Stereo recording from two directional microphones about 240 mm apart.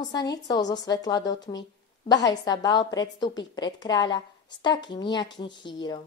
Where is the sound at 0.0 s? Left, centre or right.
Centre.